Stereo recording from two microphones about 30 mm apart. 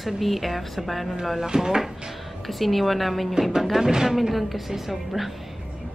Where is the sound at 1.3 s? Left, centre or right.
Right.